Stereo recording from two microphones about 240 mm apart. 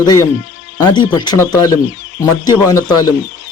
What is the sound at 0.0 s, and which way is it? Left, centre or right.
Speech, centre.